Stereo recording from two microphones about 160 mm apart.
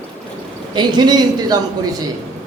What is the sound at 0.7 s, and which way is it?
Speech, 25° right (ahead or behind).